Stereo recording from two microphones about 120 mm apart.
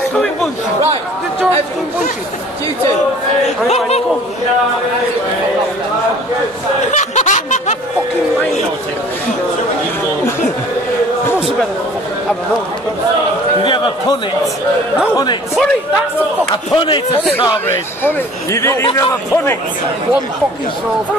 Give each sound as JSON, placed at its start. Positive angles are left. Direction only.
{"t": 0.1, "sound": "chatter", "side_deg": 5}
{"t": 3.4, "sound": "a man's voice", "side_deg": 65}
{"t": 6.9, "sound": "snicker", "side_deg": 85}
{"t": 16.7, "sound": "a man's voice", "side_deg": 40}
{"t": 17.6, "sound": "speech", "side_deg": 20}